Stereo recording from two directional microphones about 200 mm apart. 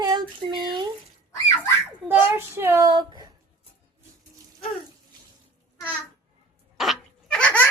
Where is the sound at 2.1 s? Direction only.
10° right (ahead or behind).